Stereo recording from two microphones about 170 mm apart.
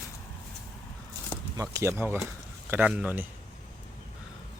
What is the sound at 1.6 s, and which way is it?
Speech, 15° right (ahead or behind).